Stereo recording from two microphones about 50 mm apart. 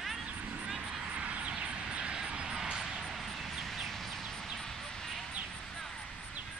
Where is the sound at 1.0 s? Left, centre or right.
Right; by 5.2 s centre.